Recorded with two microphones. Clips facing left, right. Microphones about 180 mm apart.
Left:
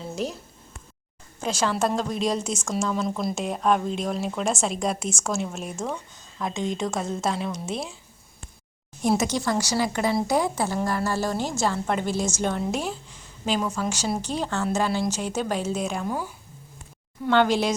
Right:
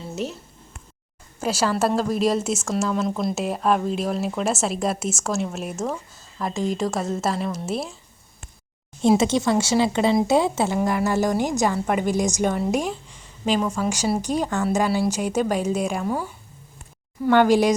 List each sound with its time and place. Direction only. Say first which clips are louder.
1.4 s a woman's voice: right 3 dB; 5° right (ahead or behind)
9.0 s a woman's voice: right 5 dB; 25° right (ahead or behind); by 13.7 s centre (ahead or behind)
13.7 s a woman's voice: right 4 dB; 10° right (ahead or behind)